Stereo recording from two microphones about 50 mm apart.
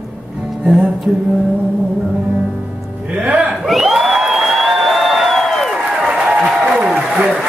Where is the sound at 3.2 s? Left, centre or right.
Right.